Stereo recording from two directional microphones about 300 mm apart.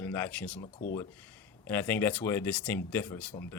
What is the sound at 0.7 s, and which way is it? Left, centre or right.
Speech, left.